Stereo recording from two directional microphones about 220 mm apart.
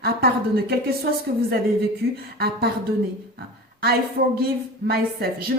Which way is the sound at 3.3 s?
45° right (ahead or behind).